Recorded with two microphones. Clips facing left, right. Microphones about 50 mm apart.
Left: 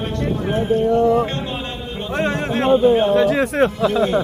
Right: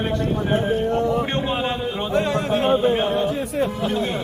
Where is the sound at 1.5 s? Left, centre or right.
Centre.